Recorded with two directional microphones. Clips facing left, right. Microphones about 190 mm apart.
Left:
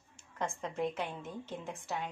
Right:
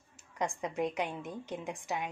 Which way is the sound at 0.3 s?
15° right (ahead or behind).